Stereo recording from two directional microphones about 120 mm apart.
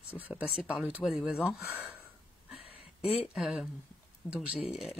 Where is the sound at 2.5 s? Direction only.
Centre (ahead or behind).